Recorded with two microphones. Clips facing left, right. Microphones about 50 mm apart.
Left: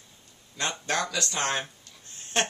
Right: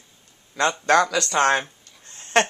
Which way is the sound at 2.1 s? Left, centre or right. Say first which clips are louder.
Right 8 dB; right.